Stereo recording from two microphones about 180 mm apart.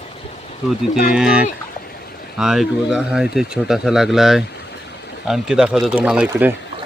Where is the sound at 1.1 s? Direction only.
5° right (ahead or behind).